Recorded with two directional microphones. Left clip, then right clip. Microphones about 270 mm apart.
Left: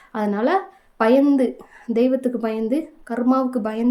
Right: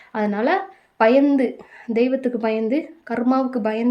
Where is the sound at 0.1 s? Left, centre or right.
Centre.